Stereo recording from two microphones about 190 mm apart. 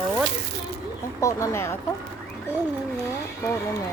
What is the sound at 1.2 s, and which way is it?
Speech, 15° left (ahead or behind).